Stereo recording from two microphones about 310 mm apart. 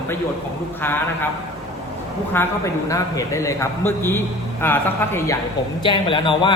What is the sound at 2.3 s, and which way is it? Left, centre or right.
A man's voice, centre.